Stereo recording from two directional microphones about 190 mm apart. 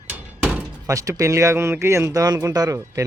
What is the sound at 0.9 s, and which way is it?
Speech, 15° right (ahead or behind).